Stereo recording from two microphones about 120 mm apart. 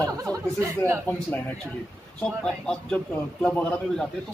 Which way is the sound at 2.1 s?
5° left (ahead or behind).